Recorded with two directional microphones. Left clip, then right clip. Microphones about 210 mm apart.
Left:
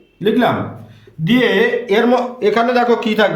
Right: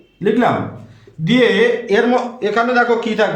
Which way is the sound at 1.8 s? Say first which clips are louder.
Left 1 dB; 40° left (ahead or behind).